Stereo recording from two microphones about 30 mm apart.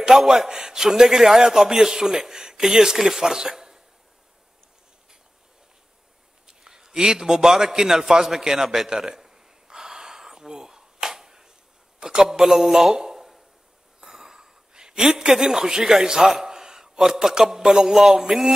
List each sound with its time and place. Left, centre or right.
0.1 s a man's voice: centre
0.5 s a man's voice: centre
6.6 s a sound: centre
7.1 s a man's voice: centre
8.8 s gasp: centre
11.1 s a sound: centre
12.0 s a man's voice: right
14.0 s a sound: centre
17.3 s a man's voice: centre